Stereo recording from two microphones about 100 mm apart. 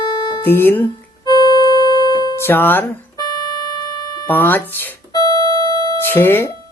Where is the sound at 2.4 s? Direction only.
20° left (ahead or behind).